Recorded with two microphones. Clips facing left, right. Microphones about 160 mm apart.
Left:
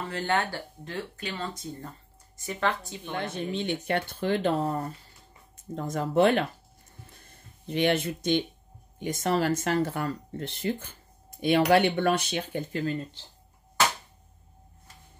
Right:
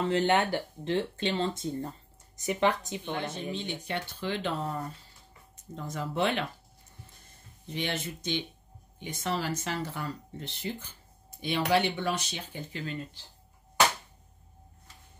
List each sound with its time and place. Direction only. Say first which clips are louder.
0.1 s speech: right 1 dB; 20° right (ahead or behind)
3.1 s speech: left 3 dB; 60° left (ahead or behind)
7.6 s speech: left 9 dB; 60° left (ahead or behind); by 13.0 s 45° left (ahead or behind)